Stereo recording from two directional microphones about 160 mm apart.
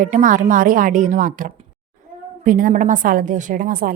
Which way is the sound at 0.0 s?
55° right (ahead or behind).